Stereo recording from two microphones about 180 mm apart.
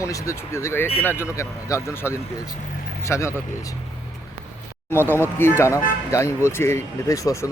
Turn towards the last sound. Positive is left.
turn(degrees=20)  # may be behind; listen again after turning